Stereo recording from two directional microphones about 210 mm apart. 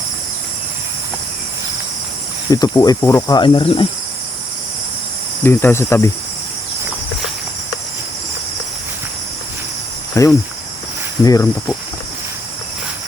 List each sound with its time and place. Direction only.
2.5 s speech: 20° left (ahead or behind)
5.4 s speech: 10° left (ahead or behind)
10.2 s speech: 15° left (ahead or behind)